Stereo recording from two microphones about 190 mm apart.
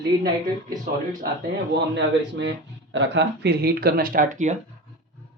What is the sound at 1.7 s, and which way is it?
Speech, 65° right (ahead or behind).